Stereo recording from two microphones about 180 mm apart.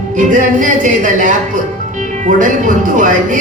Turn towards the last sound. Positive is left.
turn(degrees=-45)  # may be behind; listen again after turning